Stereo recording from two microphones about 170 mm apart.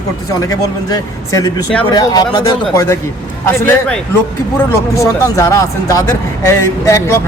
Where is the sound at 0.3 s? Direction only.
20° left (ahead or behind).